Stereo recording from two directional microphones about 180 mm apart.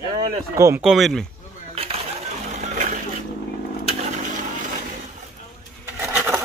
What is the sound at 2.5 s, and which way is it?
Music, 40° right (ahead or behind).